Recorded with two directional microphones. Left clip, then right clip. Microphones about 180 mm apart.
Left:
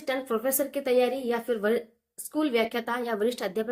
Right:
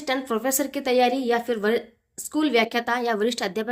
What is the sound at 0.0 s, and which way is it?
Speech, 45° right (ahead or behind).